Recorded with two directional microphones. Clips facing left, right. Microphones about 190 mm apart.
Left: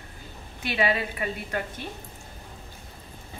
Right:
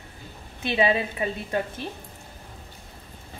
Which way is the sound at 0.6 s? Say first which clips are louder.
Right 3 dB; 25° right (ahead or behind).